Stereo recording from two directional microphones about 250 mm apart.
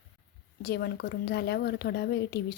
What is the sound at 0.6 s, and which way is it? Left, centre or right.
Speech, left.